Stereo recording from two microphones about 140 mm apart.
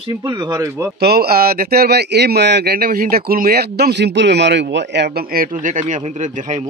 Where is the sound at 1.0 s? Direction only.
90° right.